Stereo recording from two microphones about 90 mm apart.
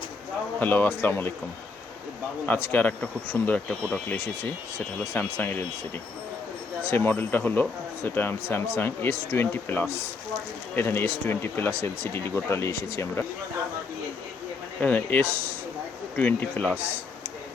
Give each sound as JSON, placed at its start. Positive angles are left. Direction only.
{"t": 0.6, "sound": "speech", "side_deg": 20}
{"t": 2.5, "sound": "speech", "side_deg": 20}
{"t": 6.8, "sound": "speech", "side_deg": 25}
{"t": 14.8, "sound": "speech", "side_deg": 15}
{"t": 16.7, "sound": "a man's voice", "side_deg": -20}